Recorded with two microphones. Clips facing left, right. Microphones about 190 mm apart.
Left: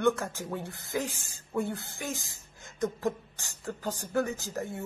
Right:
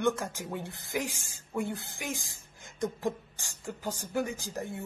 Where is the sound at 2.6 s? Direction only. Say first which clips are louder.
Left 2 dB; 20° right (ahead or behind).